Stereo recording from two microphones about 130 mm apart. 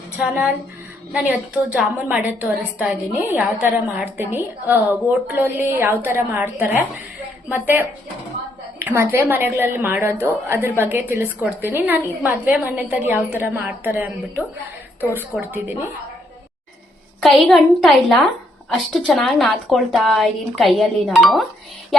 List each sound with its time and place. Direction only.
0.2 s a woman's voice: 5° right (ahead or behind)
17.2 s a woman's voice: centre (ahead or behind)